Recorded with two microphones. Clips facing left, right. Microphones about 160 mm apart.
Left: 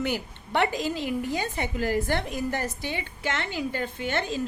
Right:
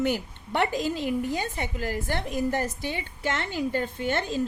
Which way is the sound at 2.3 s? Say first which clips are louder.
Right 2 dB; 45° right (ahead or behind).